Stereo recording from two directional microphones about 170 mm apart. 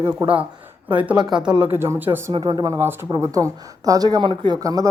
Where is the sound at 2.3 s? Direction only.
30° right (ahead or behind).